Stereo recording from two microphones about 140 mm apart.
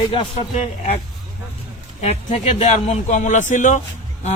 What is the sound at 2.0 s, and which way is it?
A man's voice, 50° left (ahead or behind).